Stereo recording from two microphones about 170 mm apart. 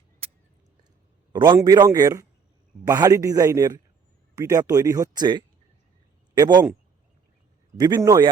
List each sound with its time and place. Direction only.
0.2 s a sound: 35° right (ahead or behind)
1.3 s a man's voice: 25° right (ahead or behind)
7.8 s speech: 25° right (ahead or behind)